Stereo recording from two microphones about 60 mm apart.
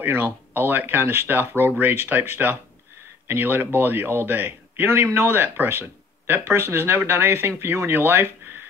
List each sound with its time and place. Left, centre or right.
0.0 s speech: right